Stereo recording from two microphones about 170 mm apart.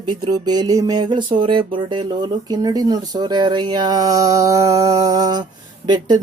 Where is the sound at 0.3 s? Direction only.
25° right (ahead or behind).